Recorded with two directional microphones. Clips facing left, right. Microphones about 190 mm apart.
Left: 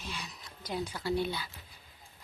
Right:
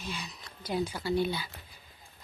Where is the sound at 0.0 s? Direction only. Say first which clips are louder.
Right 3 dB; centre (ahead or behind).